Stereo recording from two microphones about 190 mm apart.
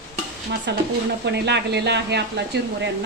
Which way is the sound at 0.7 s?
65° right (ahead or behind).